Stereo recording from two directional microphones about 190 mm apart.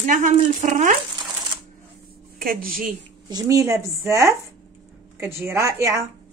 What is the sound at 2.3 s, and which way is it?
Speech, 50° right (ahead or behind).